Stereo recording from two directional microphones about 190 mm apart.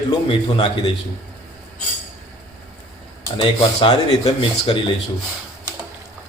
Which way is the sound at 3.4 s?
30° left (ahead or behind).